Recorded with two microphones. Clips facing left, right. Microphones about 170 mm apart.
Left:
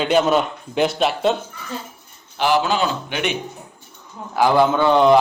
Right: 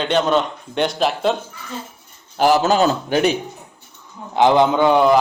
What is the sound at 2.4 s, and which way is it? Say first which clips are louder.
Speech: right 4 dB; 40° right (ahead or behind).